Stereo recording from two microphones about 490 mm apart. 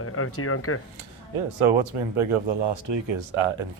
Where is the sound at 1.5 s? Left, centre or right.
Right.